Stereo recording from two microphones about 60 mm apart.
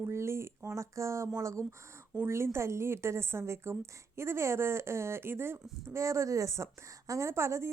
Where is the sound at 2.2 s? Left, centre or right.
Right.